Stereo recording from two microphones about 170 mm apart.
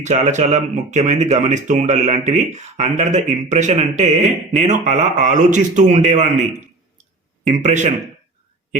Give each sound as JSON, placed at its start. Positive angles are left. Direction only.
{"t": 0.0, "sound": "speech", "side_deg": -45}
{"t": 7.4, "sound": "speech", "side_deg": -45}